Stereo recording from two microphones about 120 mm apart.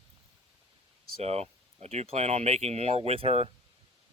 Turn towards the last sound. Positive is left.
turn(degrees=-55)  # may be behind; listen again after turning